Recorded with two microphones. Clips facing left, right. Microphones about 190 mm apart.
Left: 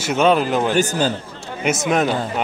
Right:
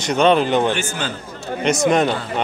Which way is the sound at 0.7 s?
40° left (ahead or behind).